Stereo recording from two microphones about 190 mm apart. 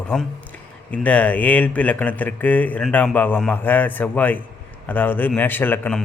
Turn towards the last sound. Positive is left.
turn(degrees=10)  # may be behind; listen again after turning